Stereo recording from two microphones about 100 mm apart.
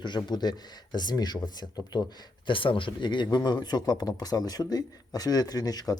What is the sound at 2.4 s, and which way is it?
Speech, 60° left (ahead or behind).